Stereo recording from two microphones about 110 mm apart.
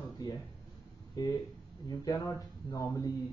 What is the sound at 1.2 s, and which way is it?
Speech, 35° left (ahead or behind).